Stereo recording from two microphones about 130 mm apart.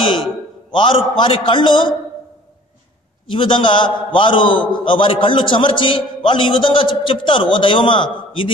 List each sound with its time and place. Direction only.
0.7 s a man's voice: 40° left (ahead or behind)
3.3 s a man's voice: 40° left (ahead or behind)